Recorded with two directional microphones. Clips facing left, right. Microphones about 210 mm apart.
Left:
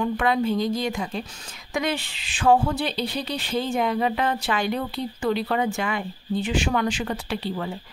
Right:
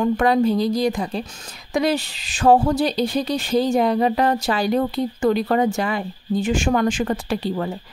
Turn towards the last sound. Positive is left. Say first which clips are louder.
# right 5 dB
turn(degrees=-45)  # may be behind; listen again after turning